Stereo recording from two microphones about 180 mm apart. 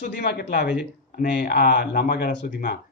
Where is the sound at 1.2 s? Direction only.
60° left (ahead or behind).